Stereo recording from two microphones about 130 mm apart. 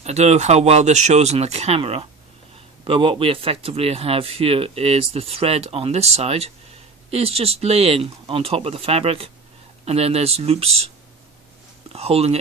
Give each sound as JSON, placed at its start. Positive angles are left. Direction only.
{"t": 0.0, "sound": "speech", "side_deg": -60}
{"t": 11.9, "sound": "speech", "side_deg": -50}